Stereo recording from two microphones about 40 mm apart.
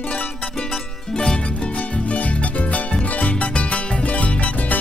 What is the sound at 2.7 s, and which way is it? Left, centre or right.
Music, left.